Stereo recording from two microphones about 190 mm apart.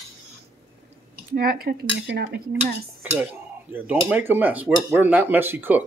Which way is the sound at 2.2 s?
55° right (ahead or behind).